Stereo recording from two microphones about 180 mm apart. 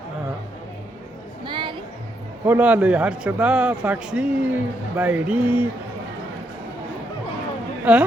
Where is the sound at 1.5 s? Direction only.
25° right (ahead or behind).